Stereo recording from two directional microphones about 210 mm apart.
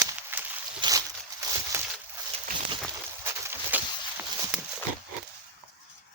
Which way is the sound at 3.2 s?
10° right (ahead or behind).